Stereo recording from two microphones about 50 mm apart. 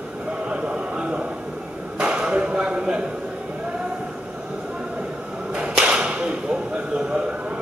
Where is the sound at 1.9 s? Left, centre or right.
Right.